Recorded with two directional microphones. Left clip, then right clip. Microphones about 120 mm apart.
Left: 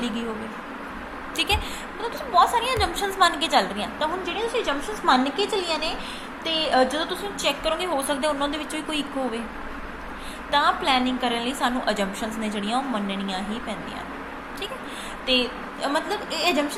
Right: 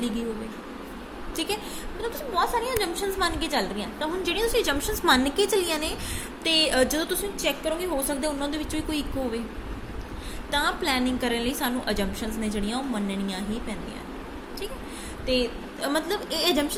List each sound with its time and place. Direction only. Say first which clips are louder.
2.0 s speech: left 6 dB; 40° right (ahead or behind)
4.2 s a woman's voice: right 1 dB; 75° right (ahead or behind); by 7.0 s 50° right (ahead or behind)
7.0 s a woman's voice: left 1 dB; 75° right (ahead or behind)
7.4 s speech: left 4 dB; 40° right (ahead or behind)
10.5 s a woman's voice: left 5 dB; 50° right (ahead or behind)
12.5 s speech: left 6 dB; 45° right (ahead or behind)
15.3 s speech: left 3 dB; 40° right (ahead or behind)